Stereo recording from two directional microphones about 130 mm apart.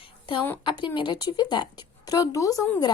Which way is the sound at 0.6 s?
40° left (ahead or behind).